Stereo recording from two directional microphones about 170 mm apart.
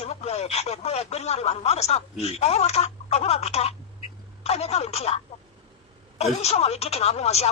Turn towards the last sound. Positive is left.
turn(degrees=40)  # may be behind; listen again after turning